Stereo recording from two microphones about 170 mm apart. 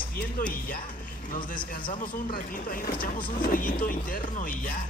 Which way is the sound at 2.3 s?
60° left (ahead or behind).